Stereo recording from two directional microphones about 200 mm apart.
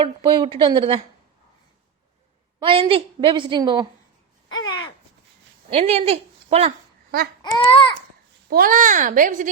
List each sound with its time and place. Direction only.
0.0 s a woman's voice: 25° right (ahead or behind)
2.6 s a woman's voice: 25° right (ahead or behind)
4.4 s a sound: 20° left (ahead or behind)
5.7 s a woman's voice: 30° right (ahead or behind)
7.6 s babbling: 25° left (ahead or behind)
8.4 s a child's voice: 45° right (ahead or behind)